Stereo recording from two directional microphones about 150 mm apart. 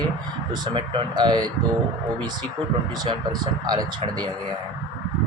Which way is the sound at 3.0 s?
30° right (ahead or behind).